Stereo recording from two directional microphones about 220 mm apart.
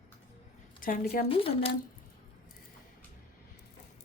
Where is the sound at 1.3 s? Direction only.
25° left (ahead or behind).